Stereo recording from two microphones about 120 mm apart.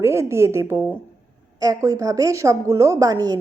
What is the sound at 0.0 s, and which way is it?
Speech, 20° right (ahead or behind).